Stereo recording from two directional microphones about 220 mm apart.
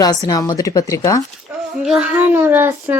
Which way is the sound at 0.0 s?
15° left (ahead or behind).